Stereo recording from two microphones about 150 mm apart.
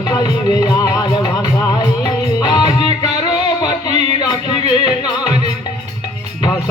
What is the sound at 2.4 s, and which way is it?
Music, 30° left (ahead or behind).